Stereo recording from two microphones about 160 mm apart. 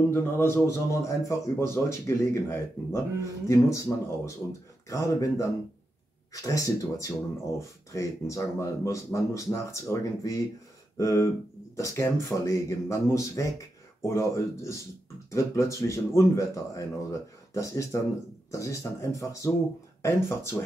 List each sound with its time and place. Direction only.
0.1 s a man's voice: 15° left (ahead or behind)
4.8 s a man's voice: 20° left (ahead or behind)